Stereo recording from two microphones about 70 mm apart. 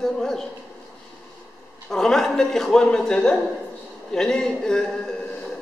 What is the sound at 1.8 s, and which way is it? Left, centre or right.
A woman's voice, centre.